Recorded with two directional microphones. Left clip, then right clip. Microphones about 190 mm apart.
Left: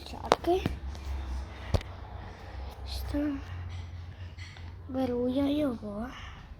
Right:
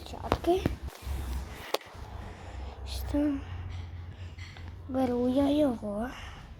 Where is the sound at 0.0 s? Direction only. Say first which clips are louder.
Left 3 dB; 15° right (ahead or behind).